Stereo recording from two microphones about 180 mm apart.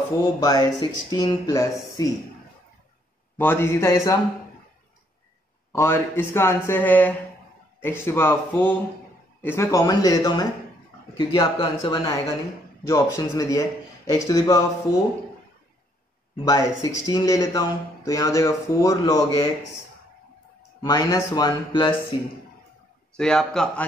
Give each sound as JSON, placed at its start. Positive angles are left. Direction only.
{"t": 0.4, "sound": "speech", "side_deg": 20}
{"t": 3.3, "sound": "speech", "side_deg": 10}
{"t": 5.7, "sound": "speech", "side_deg": 15}
{"t": 16.4, "sound": "speech", "side_deg": 15}
{"t": 20.8, "sound": "speech", "side_deg": 20}
{"t": 23.1, "sound": "speech", "side_deg": 5}